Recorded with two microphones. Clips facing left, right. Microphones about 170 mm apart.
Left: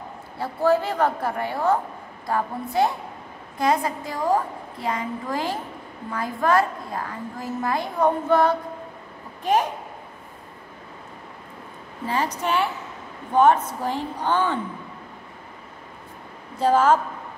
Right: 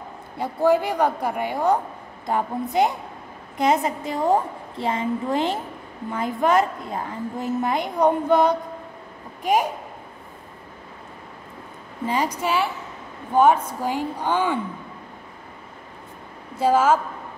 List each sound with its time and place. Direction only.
0.4 s a woman's voice: 15° right (ahead or behind)
12.1 s a woman's voice: 15° right (ahead or behind)
16.5 s a woman's voice: 10° right (ahead or behind)